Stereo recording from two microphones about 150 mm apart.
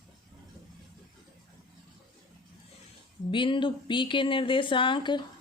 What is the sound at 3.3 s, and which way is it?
A woman's voice, 35° left (ahead or behind).